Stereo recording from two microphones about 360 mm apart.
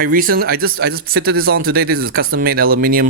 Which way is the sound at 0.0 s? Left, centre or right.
Right.